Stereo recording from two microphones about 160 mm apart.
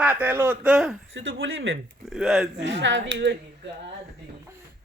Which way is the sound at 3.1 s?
90° right.